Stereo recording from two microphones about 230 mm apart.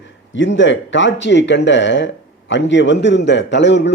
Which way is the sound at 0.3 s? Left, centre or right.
Left.